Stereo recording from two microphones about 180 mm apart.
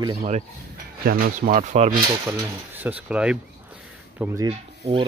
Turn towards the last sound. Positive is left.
turn(degrees=-35)  # may be behind; listen again after turning